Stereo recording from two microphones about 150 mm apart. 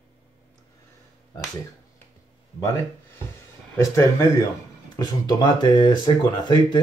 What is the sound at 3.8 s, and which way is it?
Speech, 20° left (ahead or behind).